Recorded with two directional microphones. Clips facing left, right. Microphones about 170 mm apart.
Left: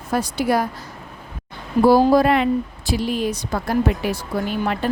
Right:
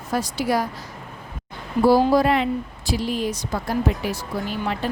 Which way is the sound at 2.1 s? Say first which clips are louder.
Left 3 dB; 55° left (ahead or behind).